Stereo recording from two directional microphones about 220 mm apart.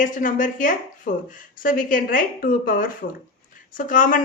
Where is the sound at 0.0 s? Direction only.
35° left (ahead or behind).